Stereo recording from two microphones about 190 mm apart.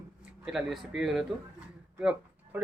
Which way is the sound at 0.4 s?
Centre (ahead or behind).